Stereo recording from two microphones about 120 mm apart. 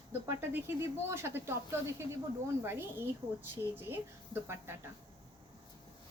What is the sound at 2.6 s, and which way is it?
Speech, 20° right (ahead or behind).